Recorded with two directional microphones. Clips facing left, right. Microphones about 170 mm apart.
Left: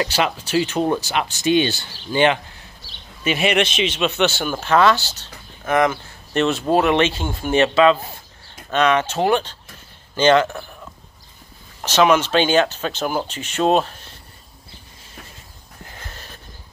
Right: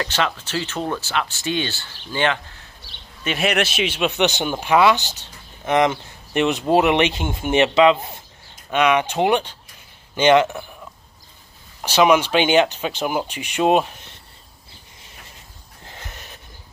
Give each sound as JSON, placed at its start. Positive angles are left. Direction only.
{"t": 0.0, "sound": "speech", "side_deg": 10}
{"t": 3.3, "sound": "speech", "side_deg": 0}
{"t": 11.8, "sound": "speech", "side_deg": -10}
{"t": 15.9, "sound": "a sound", "side_deg": -20}